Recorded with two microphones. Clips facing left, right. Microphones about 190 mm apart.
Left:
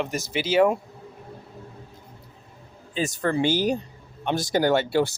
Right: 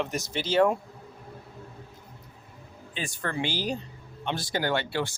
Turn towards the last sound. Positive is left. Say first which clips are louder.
# left 7 dB
turn(degrees=40)  # may be behind; listen again after turning